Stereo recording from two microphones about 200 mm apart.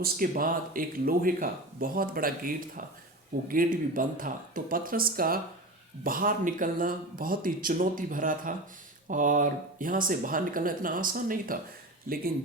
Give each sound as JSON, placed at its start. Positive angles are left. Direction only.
{"t": 0.0, "sound": "speech", "side_deg": -45}